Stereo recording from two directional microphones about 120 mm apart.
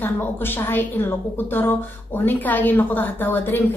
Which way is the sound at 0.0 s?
15° left (ahead or behind).